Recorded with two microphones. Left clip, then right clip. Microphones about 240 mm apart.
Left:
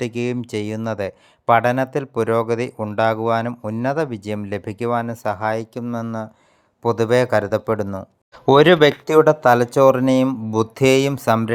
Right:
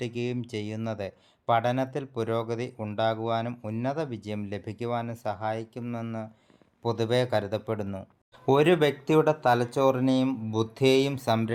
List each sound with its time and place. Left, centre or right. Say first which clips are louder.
0.0 s speech: left 9 dB; left